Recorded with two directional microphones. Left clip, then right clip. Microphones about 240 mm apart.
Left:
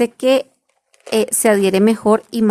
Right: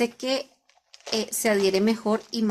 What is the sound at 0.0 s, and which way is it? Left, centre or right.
Speech, left.